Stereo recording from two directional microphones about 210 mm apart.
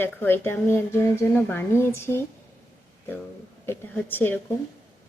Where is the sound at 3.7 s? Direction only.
10° left (ahead or behind).